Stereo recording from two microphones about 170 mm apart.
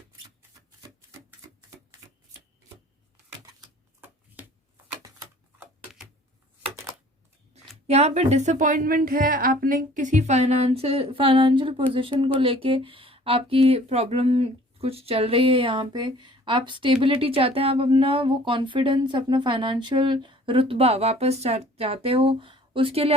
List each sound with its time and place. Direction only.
7.9 s speech: 40° right (ahead or behind)